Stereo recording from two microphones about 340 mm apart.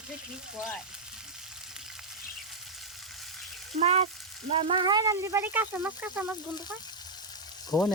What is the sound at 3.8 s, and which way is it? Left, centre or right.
Speech, centre.